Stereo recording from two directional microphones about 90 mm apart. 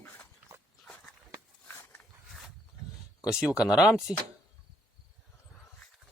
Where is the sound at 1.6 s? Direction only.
25° left (ahead or behind).